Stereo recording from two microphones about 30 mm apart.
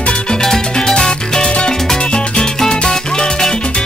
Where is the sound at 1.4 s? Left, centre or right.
Left.